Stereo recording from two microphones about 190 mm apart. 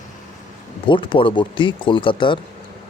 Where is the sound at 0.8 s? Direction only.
25° left (ahead or behind).